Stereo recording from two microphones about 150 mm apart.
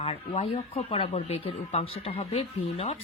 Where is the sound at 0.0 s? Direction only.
40° left (ahead or behind).